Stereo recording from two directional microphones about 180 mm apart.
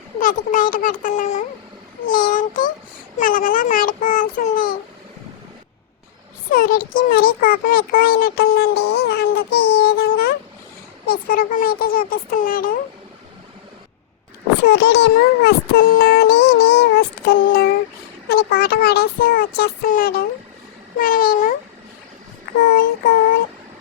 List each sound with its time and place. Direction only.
0.2 s a child's voice: 45° left (ahead or behind)
6.5 s a child's voice: 50° left (ahead or behind)
14.7 s a child's voice: 65° left (ahead or behind); by 21.5 s 50° left (ahead or behind)
22.7 s a child's voice: 55° left (ahead or behind)